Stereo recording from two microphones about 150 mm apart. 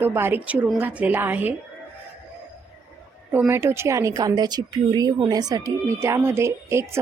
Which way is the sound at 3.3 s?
15° right (ahead or behind).